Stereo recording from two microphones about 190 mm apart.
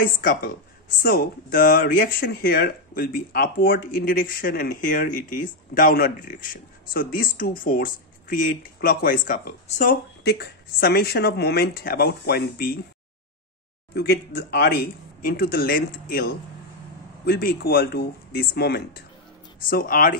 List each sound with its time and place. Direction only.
0.0 s speech: 50° left (ahead or behind)
10.2 s speech: 55° left (ahead or behind)
13.9 s speech: 55° left (ahead or behind)
17.3 s speech: 55° left (ahead or behind)